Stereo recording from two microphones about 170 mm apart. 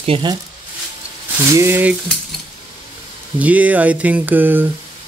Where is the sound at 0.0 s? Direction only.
30° right (ahead or behind).